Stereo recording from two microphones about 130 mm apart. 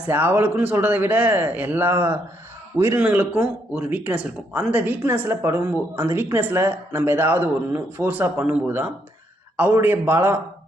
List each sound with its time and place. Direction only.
0.1 s a man's voice: 15° right (ahead or behind)